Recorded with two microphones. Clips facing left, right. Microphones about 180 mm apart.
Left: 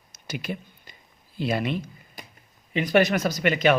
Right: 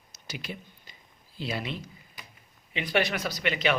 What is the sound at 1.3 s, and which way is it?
Speech, 55° left (ahead or behind).